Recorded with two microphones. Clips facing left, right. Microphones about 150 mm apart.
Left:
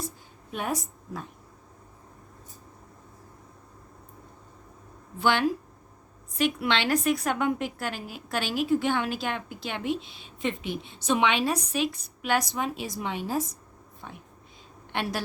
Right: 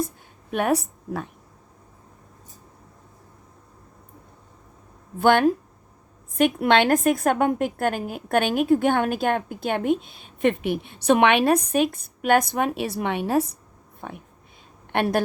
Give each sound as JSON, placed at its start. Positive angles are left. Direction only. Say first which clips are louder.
{"t": 0.5, "sound": "a woman's voice", "louder": "right 9 dB", "side_deg": -65}
{"t": 5.2, "sound": "a woman's voice", "louder": "right 7 dB", "side_deg": -50}